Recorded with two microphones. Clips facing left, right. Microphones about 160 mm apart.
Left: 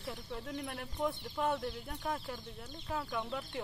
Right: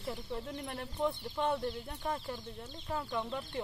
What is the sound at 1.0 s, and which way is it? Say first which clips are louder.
Speech: right 1 dB; centre (ahead or behind).